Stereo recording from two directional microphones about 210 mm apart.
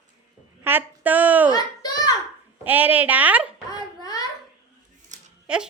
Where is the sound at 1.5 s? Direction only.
20° left (ahead or behind).